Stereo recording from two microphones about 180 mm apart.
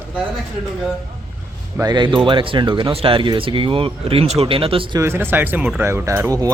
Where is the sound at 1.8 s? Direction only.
25° right (ahead or behind).